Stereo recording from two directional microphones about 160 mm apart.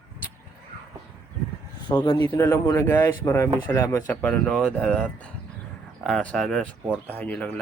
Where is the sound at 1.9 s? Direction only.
25° left (ahead or behind).